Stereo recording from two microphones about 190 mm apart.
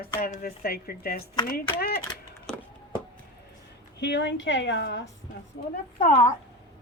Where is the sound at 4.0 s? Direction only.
65° left (ahead or behind).